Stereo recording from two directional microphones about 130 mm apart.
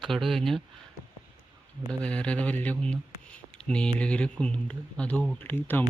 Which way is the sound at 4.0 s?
10° left (ahead or behind).